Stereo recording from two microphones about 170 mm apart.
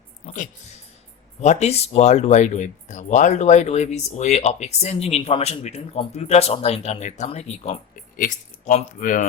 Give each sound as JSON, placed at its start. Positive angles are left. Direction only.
{"t": 1.4, "sound": "speech", "side_deg": 40}